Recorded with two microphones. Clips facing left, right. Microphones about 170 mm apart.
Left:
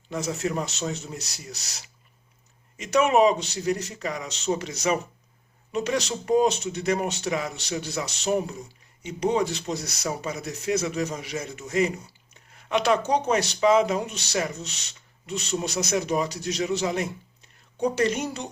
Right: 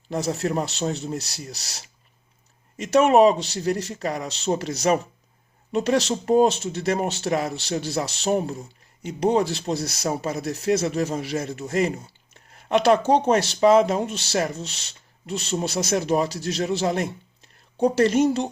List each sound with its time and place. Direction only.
0.1 s speech: 35° right (ahead or behind)